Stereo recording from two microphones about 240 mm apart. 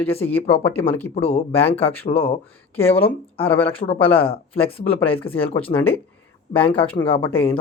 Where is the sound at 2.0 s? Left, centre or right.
Left.